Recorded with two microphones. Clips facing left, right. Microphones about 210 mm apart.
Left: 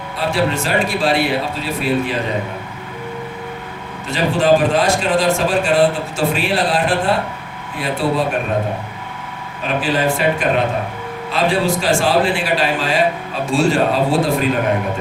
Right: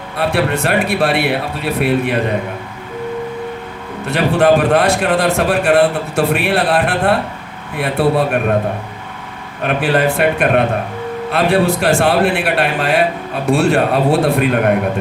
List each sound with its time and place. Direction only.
0.2 s a man's voice: 60° right (ahead or behind)
4.0 s a man's voice: 60° right (ahead or behind)
9.6 s a man's voice: 60° right (ahead or behind)